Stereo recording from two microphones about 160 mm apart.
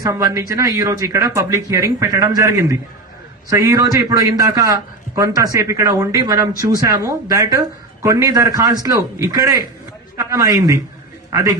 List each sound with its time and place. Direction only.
0.0 s a man's voice: 20° right (ahead or behind)